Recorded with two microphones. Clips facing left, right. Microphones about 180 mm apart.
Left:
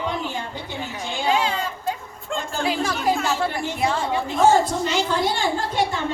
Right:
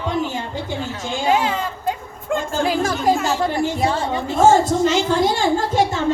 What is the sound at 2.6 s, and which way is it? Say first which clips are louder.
Music: right 3 dB; 45° right (ahead or behind).